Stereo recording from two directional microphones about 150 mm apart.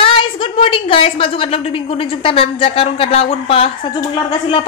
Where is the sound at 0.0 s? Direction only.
35° left (ahead or behind).